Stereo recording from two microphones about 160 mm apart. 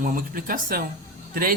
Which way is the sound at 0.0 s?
60° right (ahead or behind).